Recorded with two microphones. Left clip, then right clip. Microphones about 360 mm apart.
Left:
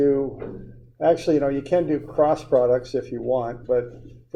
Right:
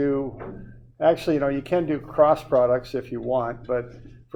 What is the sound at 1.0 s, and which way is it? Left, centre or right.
Speech, right.